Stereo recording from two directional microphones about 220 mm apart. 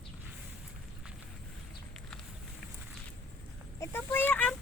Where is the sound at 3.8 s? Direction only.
10° left (ahead or behind).